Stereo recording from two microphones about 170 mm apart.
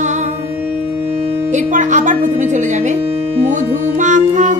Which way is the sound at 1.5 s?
45° right (ahead or behind).